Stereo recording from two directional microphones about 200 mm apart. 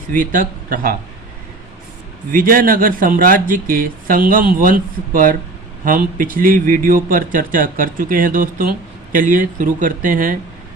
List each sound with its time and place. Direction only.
0.1 s speech: 45° right (ahead or behind)
2.3 s speech: 45° right (ahead or behind)